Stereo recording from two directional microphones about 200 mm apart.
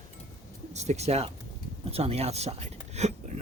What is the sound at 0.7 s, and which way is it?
Speech, 35° right (ahead or behind).